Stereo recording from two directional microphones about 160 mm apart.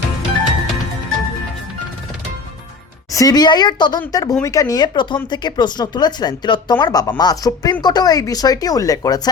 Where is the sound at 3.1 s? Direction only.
20° left (ahead or behind).